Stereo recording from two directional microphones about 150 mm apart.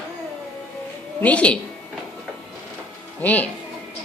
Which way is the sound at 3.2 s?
10° left (ahead or behind).